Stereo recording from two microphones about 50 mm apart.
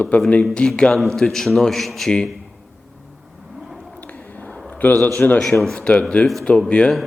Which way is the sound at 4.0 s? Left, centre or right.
Left.